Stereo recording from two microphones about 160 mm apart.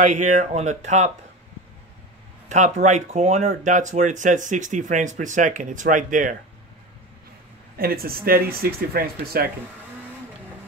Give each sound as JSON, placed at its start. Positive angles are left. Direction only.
{"t": 0.0, "sound": "speech", "side_deg": -50}
{"t": 2.5, "sound": "speech", "side_deg": -50}
{"t": 7.7, "sound": "speech", "side_deg": -70}